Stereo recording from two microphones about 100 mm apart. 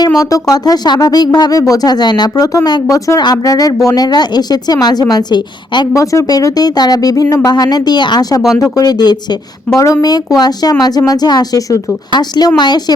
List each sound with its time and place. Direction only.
0.1 s a woman's voice: 35° left (ahead or behind)
5.9 s a woman's voice: 35° left (ahead or behind)